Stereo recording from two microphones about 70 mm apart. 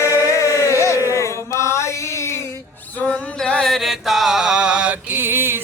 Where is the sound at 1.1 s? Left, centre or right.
Left.